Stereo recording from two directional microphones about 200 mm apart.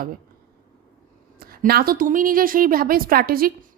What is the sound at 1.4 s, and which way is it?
A woman's voice, 45° right (ahead or behind).